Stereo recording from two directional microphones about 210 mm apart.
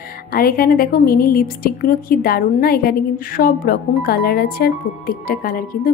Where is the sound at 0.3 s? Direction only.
45° left (ahead or behind).